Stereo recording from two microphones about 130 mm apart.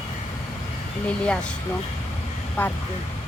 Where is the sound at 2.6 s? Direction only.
15° left (ahead or behind).